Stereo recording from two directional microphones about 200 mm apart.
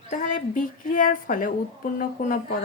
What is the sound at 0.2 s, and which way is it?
A woman's voice, 40° left (ahead or behind).